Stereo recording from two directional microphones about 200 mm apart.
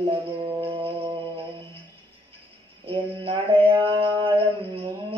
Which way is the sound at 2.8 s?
30° right (ahead or behind).